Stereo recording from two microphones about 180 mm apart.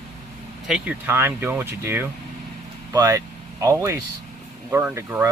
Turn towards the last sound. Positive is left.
turn(degrees=-15)  # may be behind; listen again after turning